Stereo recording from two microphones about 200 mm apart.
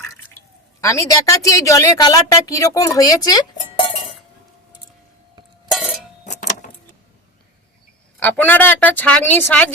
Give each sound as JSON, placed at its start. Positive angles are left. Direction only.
{"t": 0.8, "sound": "a woman's voice", "side_deg": 15}
{"t": 5.7, "sound": "a sound", "side_deg": 0}
{"t": 6.2, "sound": "vehicle", "side_deg": 35}
{"t": 8.2, "sound": "a woman's voice", "side_deg": 10}